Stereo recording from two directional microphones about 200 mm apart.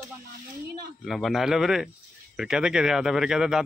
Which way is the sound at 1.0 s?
Centre (ahead or behind).